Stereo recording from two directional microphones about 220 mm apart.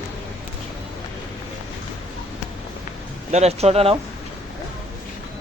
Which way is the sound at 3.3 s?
30° right (ahead or behind).